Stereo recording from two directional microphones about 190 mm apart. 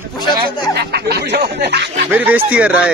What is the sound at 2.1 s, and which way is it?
Speech, 10° right (ahead or behind).